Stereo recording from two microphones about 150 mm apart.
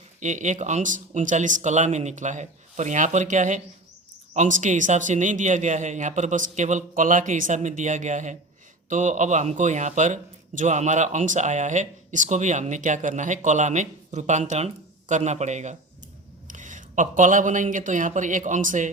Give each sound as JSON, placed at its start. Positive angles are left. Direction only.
{"t": 0.2, "sound": "a man's voice", "side_deg": -55}